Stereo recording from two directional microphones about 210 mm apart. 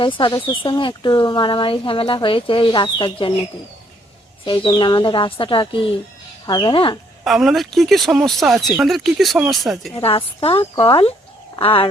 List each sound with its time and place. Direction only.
0.0 s speech: 25° left (ahead or behind)
4.4 s speech: 25° left (ahead or behind)
7.3 s speech: centre (ahead or behind)
9.9 s speech: 25° left (ahead or behind)